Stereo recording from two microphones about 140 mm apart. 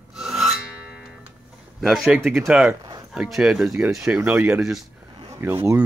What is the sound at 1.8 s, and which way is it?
Speech, centre (ahead or behind).